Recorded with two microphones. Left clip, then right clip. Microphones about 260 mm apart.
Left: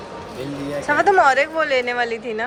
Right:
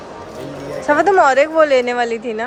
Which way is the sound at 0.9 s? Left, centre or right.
Centre.